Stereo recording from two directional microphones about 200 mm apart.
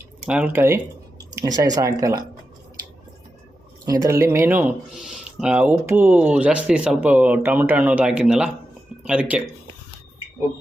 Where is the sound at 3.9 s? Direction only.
15° right (ahead or behind).